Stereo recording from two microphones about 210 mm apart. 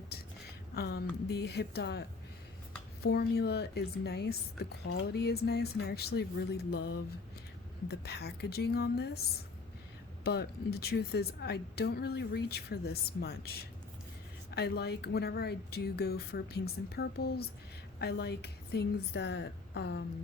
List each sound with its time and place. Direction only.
0.8 s a woman's voice: 50° left (ahead or behind)
10.2 s a woman's voice: 50° left (ahead or behind)